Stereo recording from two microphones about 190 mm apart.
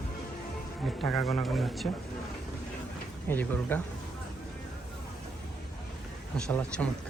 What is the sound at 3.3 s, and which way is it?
Speech, 10° left (ahead or behind).